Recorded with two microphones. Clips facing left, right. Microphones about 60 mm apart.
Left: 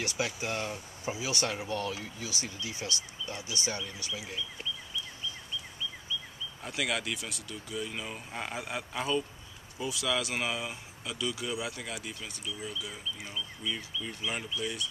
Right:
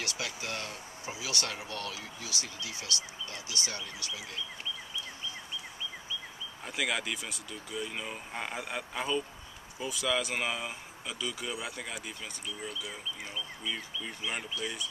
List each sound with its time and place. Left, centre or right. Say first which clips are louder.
0.0 s speech: left 4 dB; left
6.6 s speech: even; centre